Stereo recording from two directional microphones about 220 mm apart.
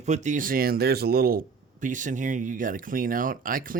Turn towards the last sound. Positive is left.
turn(degrees=-40)  # may be behind; listen again after turning